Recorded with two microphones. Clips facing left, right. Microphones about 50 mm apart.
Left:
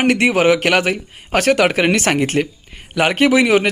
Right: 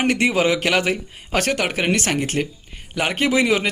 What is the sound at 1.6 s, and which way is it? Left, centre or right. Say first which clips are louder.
Speech: left 7 dB; left.